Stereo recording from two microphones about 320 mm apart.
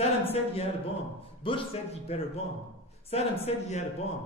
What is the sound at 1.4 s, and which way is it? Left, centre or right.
A man's voice, centre.